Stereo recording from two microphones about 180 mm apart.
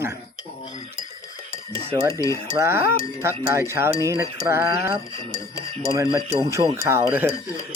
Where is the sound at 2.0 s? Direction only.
15° right (ahead or behind).